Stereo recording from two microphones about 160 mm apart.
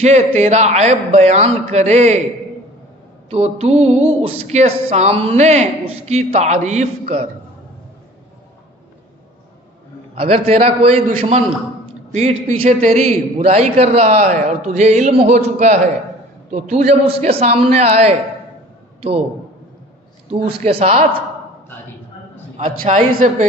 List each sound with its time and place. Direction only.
0.0 s a man's voice: 45° right (ahead or behind)
3.2 s a man's voice: 40° right (ahead or behind)
10.2 s a man's voice: 35° right (ahead or behind)
20.5 s speech: 35° right (ahead or behind)
23.1 s a man's voice: 50° right (ahead or behind)